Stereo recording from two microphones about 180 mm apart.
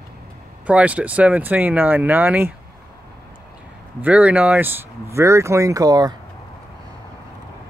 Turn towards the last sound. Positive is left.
turn(degrees=-20)  # may be behind; listen again after turning